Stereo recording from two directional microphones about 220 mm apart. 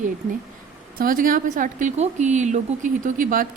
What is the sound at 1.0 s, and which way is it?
Speech, 40° right (ahead or behind).